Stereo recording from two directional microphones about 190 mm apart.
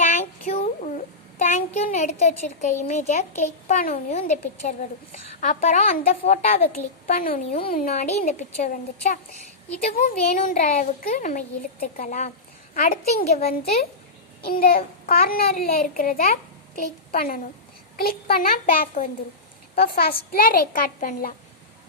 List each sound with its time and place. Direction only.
0.4 s a sound: 35° left (ahead or behind)
2.4 s a child's voice: 40° left (ahead or behind)
6.8 s a woman's voice: 10° left (ahead or behind)
7.1 s a child's voice: 45° left (ahead or behind)
10.2 s a child's voice: 40° left (ahead or behind)
14.4 s a child's voice: 50° left (ahead or behind)